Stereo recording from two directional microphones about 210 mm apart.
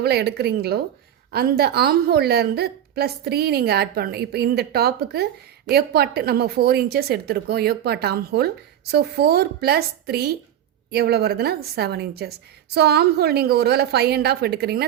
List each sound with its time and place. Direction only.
0.0 s a woman's voice: 50° right (ahead or behind)